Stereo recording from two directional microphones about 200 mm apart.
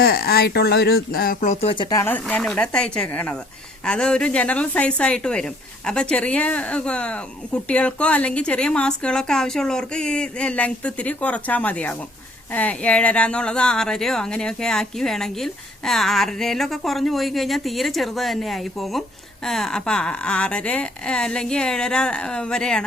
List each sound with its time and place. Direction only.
0.0 s speech: 50° left (ahead or behind)
1.7 s speech: 20° left (ahead or behind); by 22.8 s 5° left (ahead or behind)